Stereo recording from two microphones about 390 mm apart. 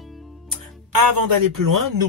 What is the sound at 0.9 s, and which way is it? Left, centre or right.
Speech, right.